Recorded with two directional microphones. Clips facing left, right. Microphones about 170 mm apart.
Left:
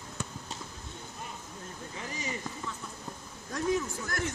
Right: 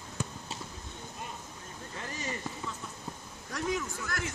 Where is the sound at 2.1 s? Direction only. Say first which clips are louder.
Even; 10° left (ahead or behind).